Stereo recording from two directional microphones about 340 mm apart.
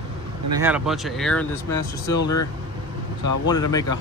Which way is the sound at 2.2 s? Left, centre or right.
Left.